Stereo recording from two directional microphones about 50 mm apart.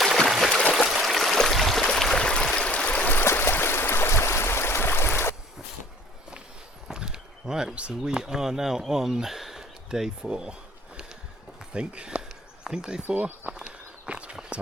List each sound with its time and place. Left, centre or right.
0.3 s stream: centre; by 3.1 s left
3.3 s stream: left
6.9 s speech: centre
11.7 s speech: right
13.0 s speech: right
13.5 s walk: centre